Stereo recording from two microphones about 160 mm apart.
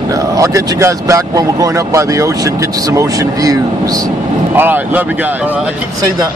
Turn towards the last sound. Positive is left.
turn(degrees=-10)  # may be behind; listen again after turning